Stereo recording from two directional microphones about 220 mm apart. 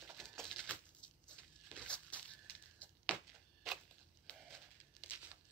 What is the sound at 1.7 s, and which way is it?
Crumpling, 5° left (ahead or behind).